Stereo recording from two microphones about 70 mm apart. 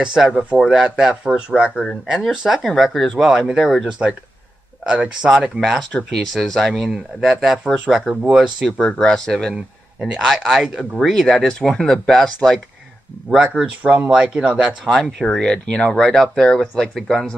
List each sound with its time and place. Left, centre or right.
0.0 s speech: centre
2.6 s speech: centre
4.8 s speech: centre
5.6 s speech: centre
8.7 s speech: centre
9.9 s speech: centre
13.3 s speech: centre
15.1 s speech: centre